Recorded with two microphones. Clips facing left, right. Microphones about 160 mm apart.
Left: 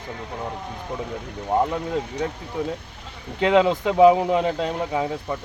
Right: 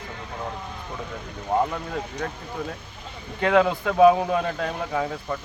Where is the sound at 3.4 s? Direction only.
20° left (ahead or behind).